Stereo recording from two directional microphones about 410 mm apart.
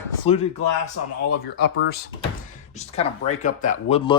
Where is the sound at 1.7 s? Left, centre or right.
Left.